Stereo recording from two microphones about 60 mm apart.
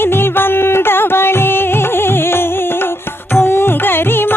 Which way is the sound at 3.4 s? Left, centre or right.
Left.